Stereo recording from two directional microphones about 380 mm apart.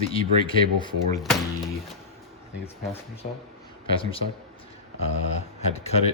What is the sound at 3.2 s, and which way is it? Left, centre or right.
Speech, centre.